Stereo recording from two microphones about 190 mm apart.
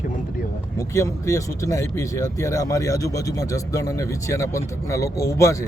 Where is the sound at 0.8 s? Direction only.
15° left (ahead or behind).